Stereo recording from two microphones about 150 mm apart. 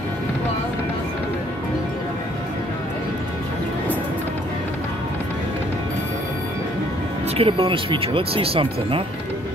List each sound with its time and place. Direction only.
7.3 s speech: 35° right (ahead or behind)